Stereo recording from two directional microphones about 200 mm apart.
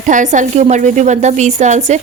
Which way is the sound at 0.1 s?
40° right (ahead or behind).